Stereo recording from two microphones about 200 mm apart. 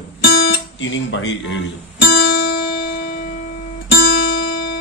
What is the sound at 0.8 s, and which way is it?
Speech, 65° left (ahead or behind).